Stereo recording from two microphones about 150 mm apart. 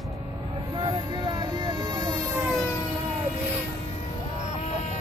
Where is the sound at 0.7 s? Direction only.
30° right (ahead or behind).